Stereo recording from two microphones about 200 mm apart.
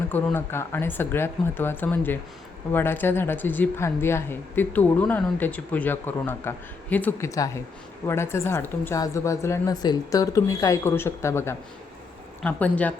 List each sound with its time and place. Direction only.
0.1 s a woman's voice: 10° left (ahead or behind)